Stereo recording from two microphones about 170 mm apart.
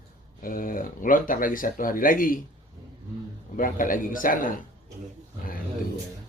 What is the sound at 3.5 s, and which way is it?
Speech, 55° left (ahead or behind).